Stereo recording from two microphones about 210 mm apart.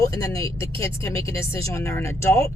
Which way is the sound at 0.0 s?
15° left (ahead or behind).